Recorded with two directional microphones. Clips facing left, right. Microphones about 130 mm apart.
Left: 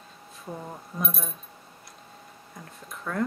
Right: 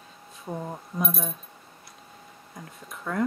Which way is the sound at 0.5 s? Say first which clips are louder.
Right 4 dB; 25° right (ahead or behind).